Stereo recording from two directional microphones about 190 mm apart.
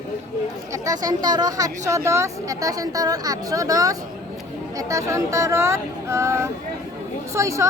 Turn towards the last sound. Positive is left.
turn(degrees=-15)  # may be behind; listen again after turning